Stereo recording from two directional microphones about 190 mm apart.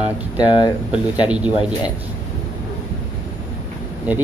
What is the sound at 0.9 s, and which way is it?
Speech, 5° right (ahead or behind).